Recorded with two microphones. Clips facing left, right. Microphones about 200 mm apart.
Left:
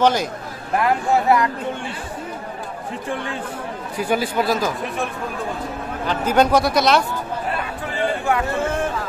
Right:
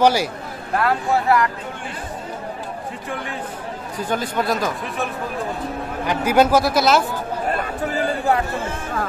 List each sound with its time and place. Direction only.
0.0 s speech: 10° right (ahead or behind)
0.7 s speech: 20° left (ahead or behind)
4.0 s speech: 10° left (ahead or behind)
7.4 s chatter: 45° right (ahead or behind)